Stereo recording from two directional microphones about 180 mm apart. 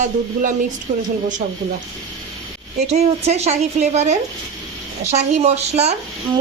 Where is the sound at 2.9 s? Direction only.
35° right (ahead or behind).